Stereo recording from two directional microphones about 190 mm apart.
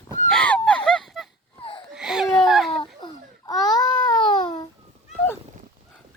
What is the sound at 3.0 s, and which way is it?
Baby cry, 20° left (ahead or behind).